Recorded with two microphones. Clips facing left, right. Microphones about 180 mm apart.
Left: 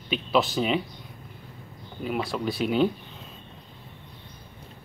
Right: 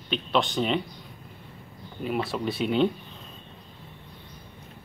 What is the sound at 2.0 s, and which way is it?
Speech, centre (ahead or behind).